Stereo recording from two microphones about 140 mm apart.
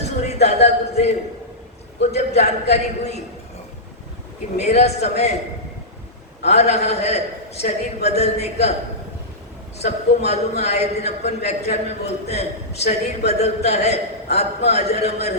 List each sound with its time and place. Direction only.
0.3 s a man's voice: 50° left (ahead or behind)
4.5 s a man's voice: 50° left (ahead or behind)
6.4 s a man's voice: 50° left (ahead or behind)
9.7 s a man's voice: 50° left (ahead or behind)